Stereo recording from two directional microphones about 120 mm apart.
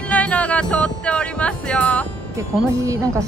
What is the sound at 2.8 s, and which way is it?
Speech, 25° right (ahead or behind).